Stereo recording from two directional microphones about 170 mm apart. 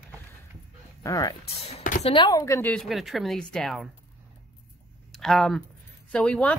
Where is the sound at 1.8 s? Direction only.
50° left (ahead or behind).